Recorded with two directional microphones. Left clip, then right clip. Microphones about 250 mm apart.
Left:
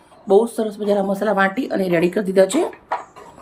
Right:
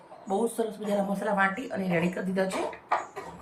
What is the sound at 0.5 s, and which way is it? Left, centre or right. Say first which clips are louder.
Speech: left 9 dB; left.